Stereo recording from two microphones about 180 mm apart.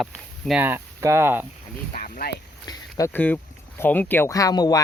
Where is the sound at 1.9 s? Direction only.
45° left (ahead or behind).